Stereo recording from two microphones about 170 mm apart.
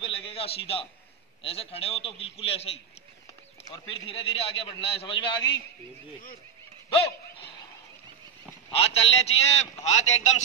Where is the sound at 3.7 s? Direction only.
35° left (ahead or behind).